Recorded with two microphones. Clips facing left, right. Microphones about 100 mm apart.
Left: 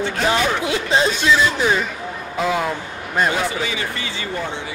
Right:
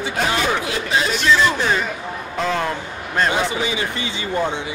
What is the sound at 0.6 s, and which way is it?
Speech, 25° left (ahead or behind).